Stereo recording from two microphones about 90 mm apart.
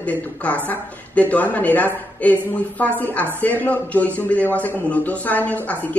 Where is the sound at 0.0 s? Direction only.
15° left (ahead or behind).